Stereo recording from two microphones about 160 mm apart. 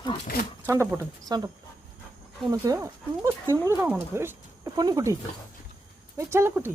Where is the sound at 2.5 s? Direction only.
20° right (ahead or behind).